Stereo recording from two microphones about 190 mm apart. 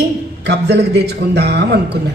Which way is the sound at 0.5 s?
60° right (ahead or behind).